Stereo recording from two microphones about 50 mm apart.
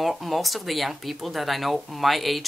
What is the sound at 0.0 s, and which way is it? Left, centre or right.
Speech, centre.